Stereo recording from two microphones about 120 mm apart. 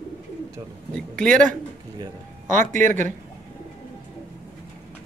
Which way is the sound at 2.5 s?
90° right.